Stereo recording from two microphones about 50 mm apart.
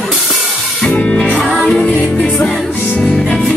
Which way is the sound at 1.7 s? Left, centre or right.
Centre.